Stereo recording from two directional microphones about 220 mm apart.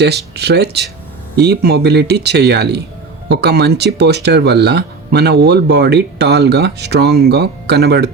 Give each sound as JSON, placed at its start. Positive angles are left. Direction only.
{"t": 0.3, "sound": "speech", "side_deg": -50}